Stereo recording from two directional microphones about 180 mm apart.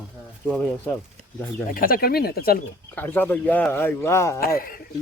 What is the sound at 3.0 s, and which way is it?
Speech, 10° left (ahead or behind).